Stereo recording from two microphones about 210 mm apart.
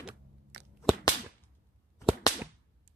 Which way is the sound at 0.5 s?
55° right (ahead or behind).